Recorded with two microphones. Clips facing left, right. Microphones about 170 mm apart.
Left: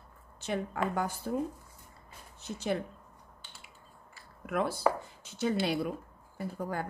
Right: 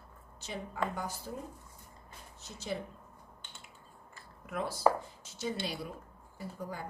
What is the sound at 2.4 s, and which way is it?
Speech, 60° left (ahead or behind).